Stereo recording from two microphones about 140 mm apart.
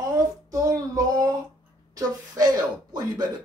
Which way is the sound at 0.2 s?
25° right (ahead or behind).